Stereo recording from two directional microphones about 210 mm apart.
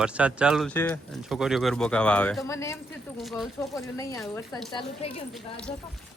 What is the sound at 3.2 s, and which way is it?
Speech, centre (ahead or behind).